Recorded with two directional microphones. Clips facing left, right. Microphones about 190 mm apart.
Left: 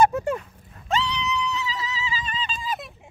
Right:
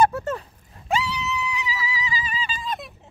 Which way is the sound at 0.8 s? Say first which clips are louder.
Even; 10° right (ahead or behind).